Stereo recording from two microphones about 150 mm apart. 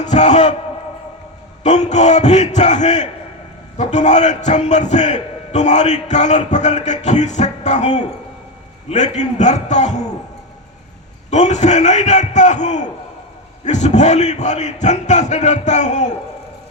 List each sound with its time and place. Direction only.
0.0 s a man's voice: 50° left (ahead or behind)
1.6 s a man's voice: 50° left (ahead or behind)
11.3 s a man's voice: 50° left (ahead or behind)